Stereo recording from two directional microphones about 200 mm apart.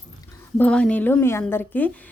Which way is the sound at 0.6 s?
5° left (ahead or behind).